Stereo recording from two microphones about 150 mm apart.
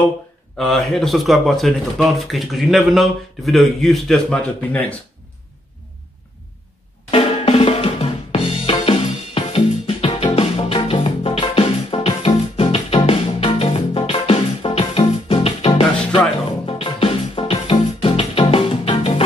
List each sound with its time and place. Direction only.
0.6 s speech: centre (ahead or behind)
7.1 s drum: 40° left (ahead or behind)
16.6 s music: 40° left (ahead or behind)